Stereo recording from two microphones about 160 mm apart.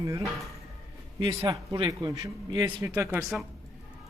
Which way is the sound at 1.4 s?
25° right (ahead or behind).